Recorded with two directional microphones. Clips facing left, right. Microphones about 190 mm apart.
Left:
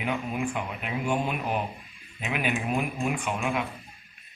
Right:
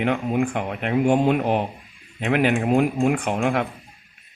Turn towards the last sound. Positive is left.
turn(degrees=-75)  # may be behind; listen again after turning